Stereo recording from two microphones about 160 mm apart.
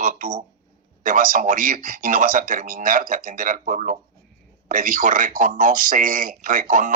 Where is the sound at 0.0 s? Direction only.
55° right (ahead or behind).